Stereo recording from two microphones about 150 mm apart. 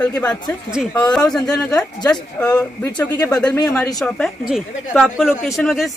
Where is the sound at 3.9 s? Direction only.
5° left (ahead or behind).